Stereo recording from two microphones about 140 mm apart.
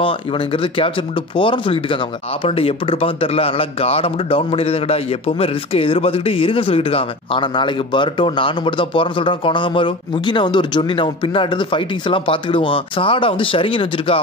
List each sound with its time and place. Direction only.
0.0 s a man's voice: 40° left (ahead or behind)